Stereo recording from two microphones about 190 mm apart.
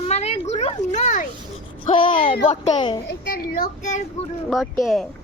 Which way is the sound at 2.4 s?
35° left (ahead or behind).